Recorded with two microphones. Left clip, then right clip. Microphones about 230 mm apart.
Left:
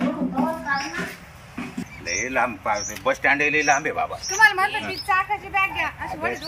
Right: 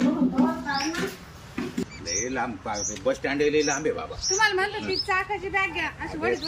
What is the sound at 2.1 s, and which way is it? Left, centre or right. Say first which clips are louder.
Speech: left 6 dB; centre.